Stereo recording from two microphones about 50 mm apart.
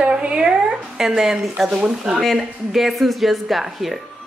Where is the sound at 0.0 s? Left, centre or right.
Right.